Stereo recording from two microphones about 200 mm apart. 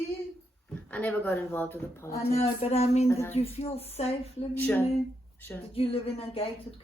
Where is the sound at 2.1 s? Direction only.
30° left (ahead or behind).